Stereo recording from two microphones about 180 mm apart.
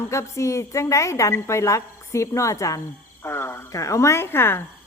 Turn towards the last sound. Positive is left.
turn(degrees=10)  # may be behind; listen again after turning